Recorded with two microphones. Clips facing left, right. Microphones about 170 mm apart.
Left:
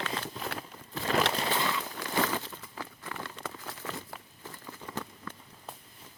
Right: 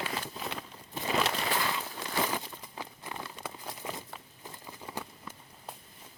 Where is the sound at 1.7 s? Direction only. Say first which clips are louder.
Left 2 dB; 20° right (ahead or behind).